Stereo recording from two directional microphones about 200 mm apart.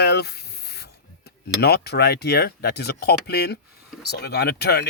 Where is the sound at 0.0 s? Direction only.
55° left (ahead or behind).